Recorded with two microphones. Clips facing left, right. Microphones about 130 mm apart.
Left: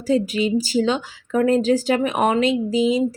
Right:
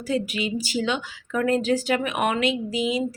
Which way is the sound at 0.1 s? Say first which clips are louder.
Left 7 dB; 35° left (ahead or behind).